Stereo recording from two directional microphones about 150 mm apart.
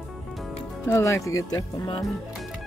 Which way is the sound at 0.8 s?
20° left (ahead or behind).